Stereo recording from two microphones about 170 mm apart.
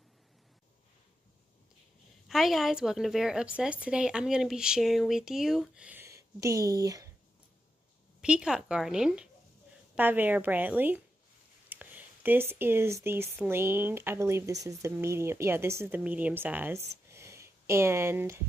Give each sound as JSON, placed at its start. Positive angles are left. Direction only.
{"t": 2.2, "sound": "a woman's voice", "side_deg": 0}
{"t": 8.2, "sound": "a woman's voice", "side_deg": -5}
{"t": 17.1, "sound": "a sound", "side_deg": -15}